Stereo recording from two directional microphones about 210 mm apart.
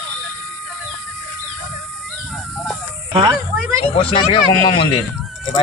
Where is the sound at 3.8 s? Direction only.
25° left (ahead or behind).